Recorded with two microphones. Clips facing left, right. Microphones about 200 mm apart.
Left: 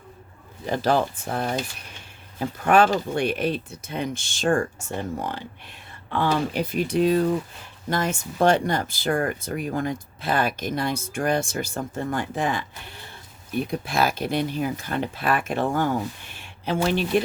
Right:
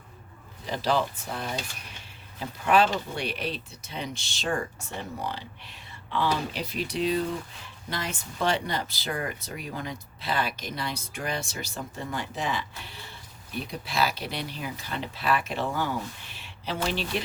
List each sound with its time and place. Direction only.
0.6 s speech: 50° left (ahead or behind)